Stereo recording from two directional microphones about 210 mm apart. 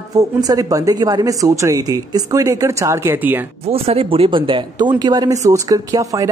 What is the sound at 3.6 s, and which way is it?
A woman's voice, 30° right (ahead or behind).